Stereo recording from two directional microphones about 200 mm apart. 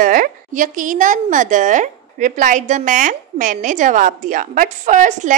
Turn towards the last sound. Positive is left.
turn(degrees=-40)  # may be behind; listen again after turning